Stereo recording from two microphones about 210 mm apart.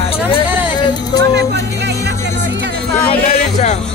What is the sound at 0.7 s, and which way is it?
Music, 20° left (ahead or behind).